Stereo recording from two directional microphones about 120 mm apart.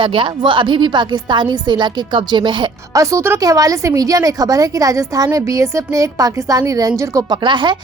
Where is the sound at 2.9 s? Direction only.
25° right (ahead or behind).